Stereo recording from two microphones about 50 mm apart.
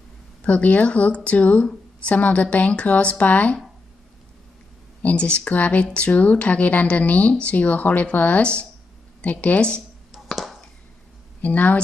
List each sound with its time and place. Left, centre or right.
0.4 s speech: left
5.0 s speech: left
10.3 s a sound: centre
11.4 s speech: left